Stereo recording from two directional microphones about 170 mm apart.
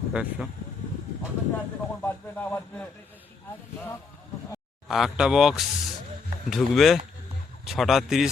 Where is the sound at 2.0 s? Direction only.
10° left (ahead or behind).